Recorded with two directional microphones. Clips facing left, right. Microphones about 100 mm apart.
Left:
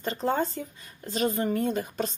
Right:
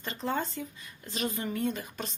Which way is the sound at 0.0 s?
40° left (ahead or behind).